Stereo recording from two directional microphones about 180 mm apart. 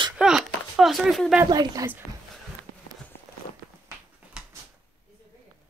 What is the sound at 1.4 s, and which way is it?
Speech, 20° right (ahead or behind).